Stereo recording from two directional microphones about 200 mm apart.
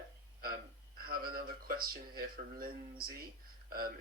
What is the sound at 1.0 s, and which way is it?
Speech, 50° right (ahead or behind).